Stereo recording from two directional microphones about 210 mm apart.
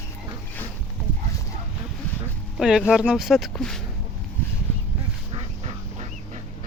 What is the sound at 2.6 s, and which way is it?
Speech, 5° right (ahead or behind).